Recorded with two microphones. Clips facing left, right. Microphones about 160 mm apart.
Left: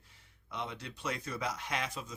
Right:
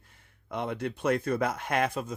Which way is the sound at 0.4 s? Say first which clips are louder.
Right 9 dB; 55° right (ahead or behind).